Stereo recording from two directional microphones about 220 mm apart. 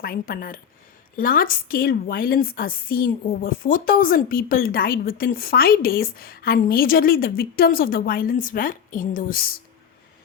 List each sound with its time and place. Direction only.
0.0 s a woman's voice: 45° left (ahead or behind)